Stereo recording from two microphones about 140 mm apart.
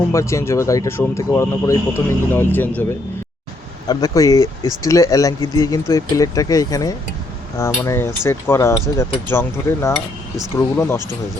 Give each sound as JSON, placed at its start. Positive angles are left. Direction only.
{"t": 0.1, "sound": "speech", "side_deg": 20}
{"t": 3.8, "sound": "speech", "side_deg": 25}